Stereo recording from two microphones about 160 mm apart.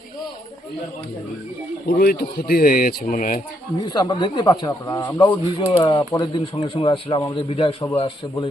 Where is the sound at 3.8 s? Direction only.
25° left (ahead or behind).